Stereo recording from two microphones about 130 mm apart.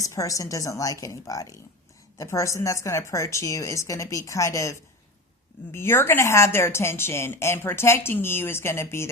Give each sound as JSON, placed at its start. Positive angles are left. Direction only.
{"t": 0.0, "sound": "a woman's voice", "side_deg": 25}